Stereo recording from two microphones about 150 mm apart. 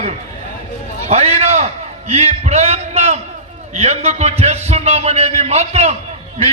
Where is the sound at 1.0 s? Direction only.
45° right (ahead or behind).